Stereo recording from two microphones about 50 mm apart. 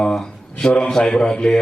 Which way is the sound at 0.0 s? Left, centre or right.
Centre.